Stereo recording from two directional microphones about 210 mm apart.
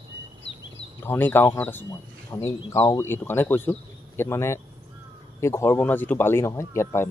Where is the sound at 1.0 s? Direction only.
10° left (ahead or behind).